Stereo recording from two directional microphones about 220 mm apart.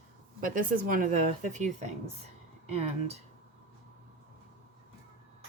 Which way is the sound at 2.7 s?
25° right (ahead or behind).